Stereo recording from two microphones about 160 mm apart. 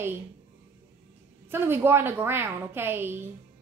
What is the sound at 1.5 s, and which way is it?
A woman's voice, 15° right (ahead or behind).